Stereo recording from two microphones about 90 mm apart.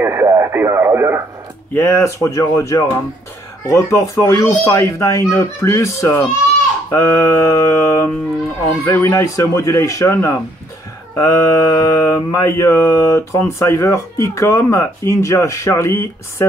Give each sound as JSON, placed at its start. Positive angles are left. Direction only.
{"t": 0.0, "sound": "radio", "side_deg": -25}
{"t": 1.7, "sound": "speech", "side_deg": 25}
{"t": 6.9, "sound": "mantra", "side_deg": 30}
{"t": 8.8, "sound": "speech", "side_deg": 25}